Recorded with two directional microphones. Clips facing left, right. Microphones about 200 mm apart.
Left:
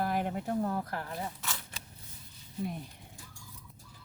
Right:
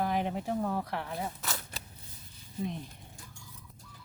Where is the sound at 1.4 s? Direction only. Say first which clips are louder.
Right 3 dB; 40° right (ahead or behind).